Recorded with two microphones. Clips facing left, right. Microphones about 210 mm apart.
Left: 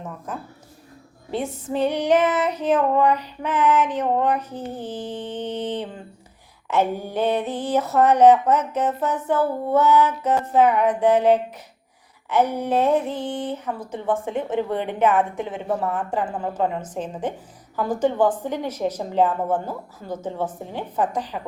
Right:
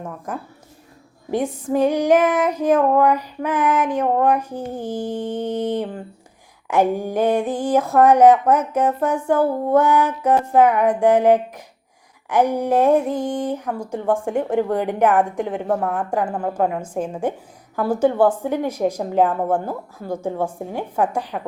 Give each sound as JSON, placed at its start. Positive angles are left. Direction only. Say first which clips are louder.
{"t": 1.3, "sound": "speech", "louder": "right 5 dB", "side_deg": -15}